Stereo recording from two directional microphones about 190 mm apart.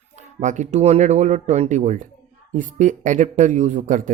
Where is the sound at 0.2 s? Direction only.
40° right (ahead or behind).